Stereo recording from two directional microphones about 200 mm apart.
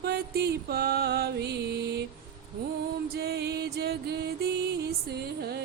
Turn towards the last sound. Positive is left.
turn(degrees=-55)  # may be behind; listen again after turning